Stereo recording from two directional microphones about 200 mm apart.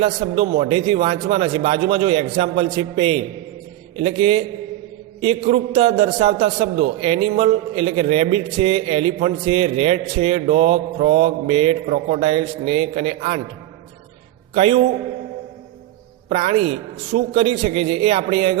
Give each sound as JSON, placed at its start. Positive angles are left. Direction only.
{"t": 0.0, "sound": "a man's voice", "side_deg": -30}
{"t": 14.5, "sound": "a man's voice", "side_deg": -30}
{"t": 16.3, "sound": "a man's voice", "side_deg": -30}